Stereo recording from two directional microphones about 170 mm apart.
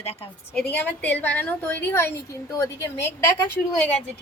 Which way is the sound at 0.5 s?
10° left (ahead or behind).